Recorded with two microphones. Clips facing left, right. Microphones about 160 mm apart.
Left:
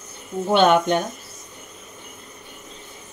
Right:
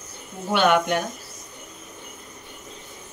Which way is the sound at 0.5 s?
25° left (ahead or behind).